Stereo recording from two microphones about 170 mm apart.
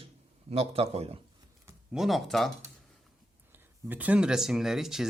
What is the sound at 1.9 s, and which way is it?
Speech, centre (ahead or behind).